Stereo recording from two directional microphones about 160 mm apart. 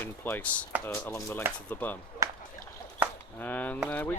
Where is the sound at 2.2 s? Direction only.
20° right (ahead or behind).